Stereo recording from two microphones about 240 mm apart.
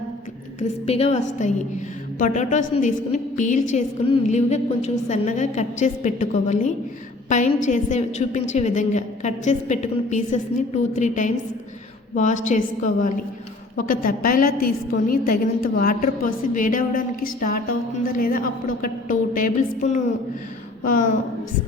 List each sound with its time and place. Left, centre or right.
0.9 s a woman's voice: left